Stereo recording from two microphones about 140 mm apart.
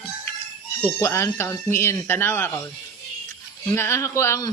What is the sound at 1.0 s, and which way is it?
Speech, 20° left (ahead or behind).